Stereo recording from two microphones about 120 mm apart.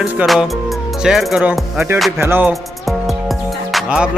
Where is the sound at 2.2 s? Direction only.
15° right (ahead or behind).